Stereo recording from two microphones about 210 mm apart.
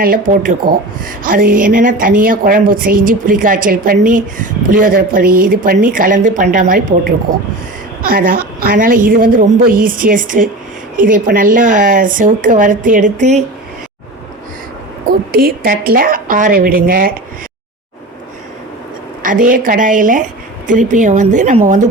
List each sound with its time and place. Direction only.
0.0 s a woman's voice: 40° right (ahead or behind)
15.3 s a woman's voice: 45° right (ahead or behind)
19.2 s a woman's voice: 40° right (ahead or behind)